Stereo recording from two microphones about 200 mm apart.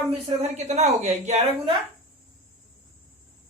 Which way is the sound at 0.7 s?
35° right (ahead or behind).